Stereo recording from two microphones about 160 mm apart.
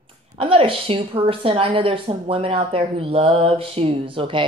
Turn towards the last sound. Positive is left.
turn(degrees=-35)  # may be behind; listen again after turning